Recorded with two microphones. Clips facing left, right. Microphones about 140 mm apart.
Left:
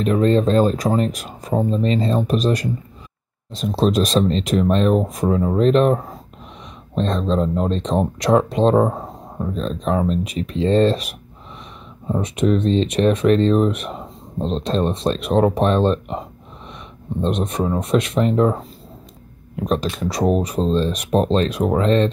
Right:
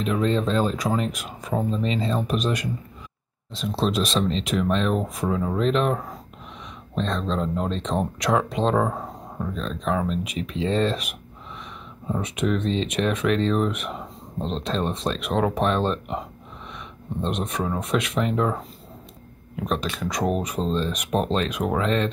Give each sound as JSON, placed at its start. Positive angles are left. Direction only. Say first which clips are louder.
{"t": 0.0, "sound": "speech", "louder": "left 6 dB", "side_deg": 40}
{"t": 7.0, "sound": "speech", "louder": "left 6 dB", "side_deg": 35}
{"t": 12.2, "sound": "speech", "louder": "left 6 dB", "side_deg": 35}
{"t": 17.2, "sound": "speech", "louder": "left 6 dB", "side_deg": 35}